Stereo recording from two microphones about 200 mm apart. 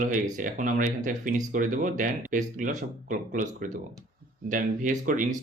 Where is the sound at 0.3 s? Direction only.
40° right (ahead or behind).